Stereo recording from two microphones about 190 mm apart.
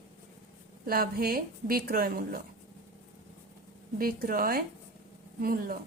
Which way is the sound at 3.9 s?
50° right (ahead or behind).